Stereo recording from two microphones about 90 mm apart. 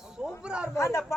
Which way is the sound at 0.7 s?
30° left (ahead or behind).